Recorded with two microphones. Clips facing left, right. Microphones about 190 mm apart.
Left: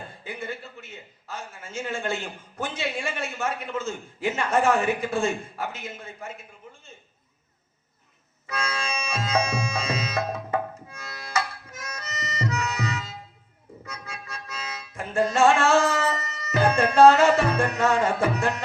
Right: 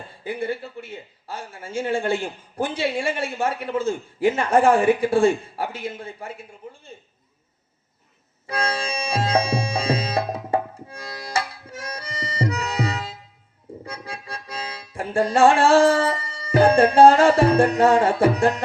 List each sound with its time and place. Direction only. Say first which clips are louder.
0.3 s speech: right 9 dB; 30° right (ahead or behind)
8.4 s music: right 5 dB; 30° right (ahead or behind)